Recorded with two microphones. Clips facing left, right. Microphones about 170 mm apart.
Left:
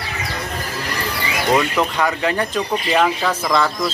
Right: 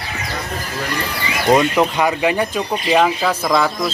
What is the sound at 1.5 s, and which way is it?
Speech, 15° right (ahead or behind).